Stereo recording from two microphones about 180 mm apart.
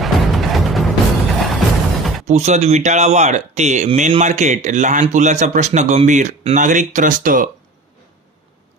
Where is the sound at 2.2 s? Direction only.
40° right (ahead or behind).